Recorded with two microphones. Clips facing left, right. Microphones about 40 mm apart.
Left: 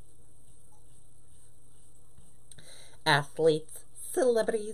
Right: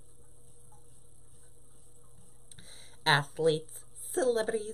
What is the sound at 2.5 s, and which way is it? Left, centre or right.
Speech, centre.